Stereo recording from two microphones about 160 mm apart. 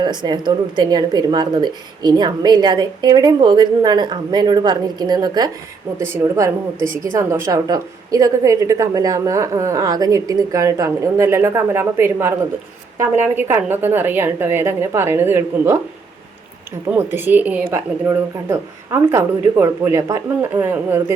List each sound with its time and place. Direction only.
0.0 s a woman's voice: 30° right (ahead or behind)
16.9 s speech: 15° right (ahead or behind)